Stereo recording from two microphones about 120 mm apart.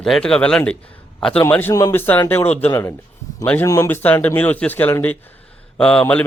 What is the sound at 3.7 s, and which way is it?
Speech, 20° left (ahead or behind).